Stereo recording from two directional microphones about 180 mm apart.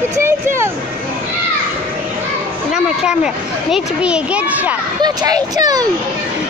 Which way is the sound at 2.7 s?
5° right (ahead or behind).